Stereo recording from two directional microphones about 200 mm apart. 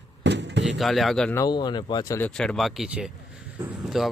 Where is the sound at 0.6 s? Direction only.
Centre (ahead or behind).